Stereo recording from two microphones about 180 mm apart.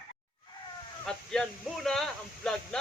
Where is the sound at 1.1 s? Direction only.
5° left (ahead or behind).